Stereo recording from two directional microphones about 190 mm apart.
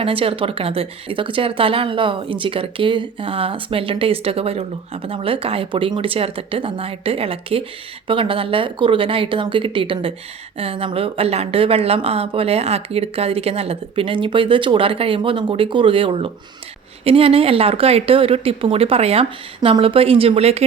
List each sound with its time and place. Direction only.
0.0 s speech: 30° right (ahead or behind)